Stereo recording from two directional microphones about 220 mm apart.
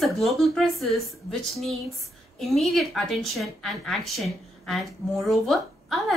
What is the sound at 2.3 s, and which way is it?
A woman's voice, centre (ahead or behind).